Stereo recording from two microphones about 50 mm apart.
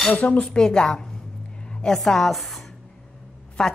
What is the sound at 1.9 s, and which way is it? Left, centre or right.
A woman's voice, centre.